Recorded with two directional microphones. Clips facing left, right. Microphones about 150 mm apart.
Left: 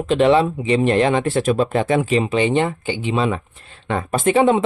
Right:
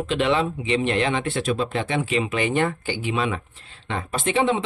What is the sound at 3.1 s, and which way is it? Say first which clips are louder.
Speech: left 6 dB; 30° left (ahead or behind).